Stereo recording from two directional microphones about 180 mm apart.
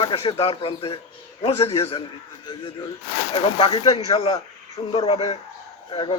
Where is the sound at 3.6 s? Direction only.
25° left (ahead or behind).